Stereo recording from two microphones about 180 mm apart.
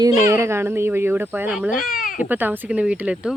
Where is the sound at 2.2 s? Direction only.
10° right (ahead or behind).